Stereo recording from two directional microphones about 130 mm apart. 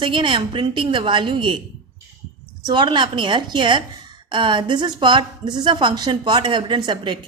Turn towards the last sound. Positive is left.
turn(degrees=-35)  # may be behind; listen again after turning